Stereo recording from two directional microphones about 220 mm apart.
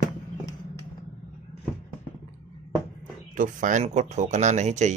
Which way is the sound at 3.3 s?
35° right (ahead or behind).